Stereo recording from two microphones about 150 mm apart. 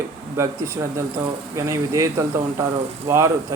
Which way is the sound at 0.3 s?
20° right (ahead or behind).